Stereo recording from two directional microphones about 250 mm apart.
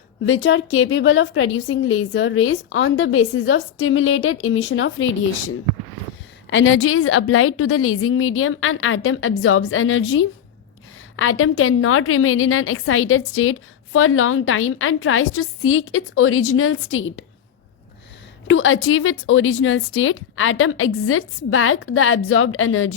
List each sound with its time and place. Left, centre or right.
0.3 s a woman's voice: left
18.4 s a woman's voice: left